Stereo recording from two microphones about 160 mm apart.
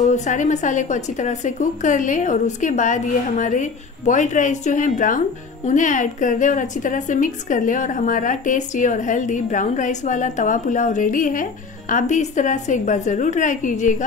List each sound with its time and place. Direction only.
0.0 s a woman's voice: 45° left (ahead or behind)